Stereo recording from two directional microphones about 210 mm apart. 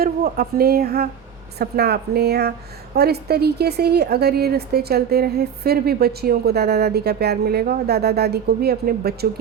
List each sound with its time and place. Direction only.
0.0 s a woman's voice: 45° right (ahead or behind)